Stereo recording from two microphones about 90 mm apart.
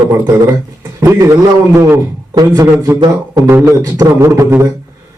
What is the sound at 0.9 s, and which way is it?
Speech, 35° right (ahead or behind).